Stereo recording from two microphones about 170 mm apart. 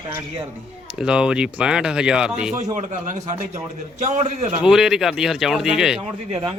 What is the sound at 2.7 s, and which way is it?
A man's voice, 45° right (ahead or behind).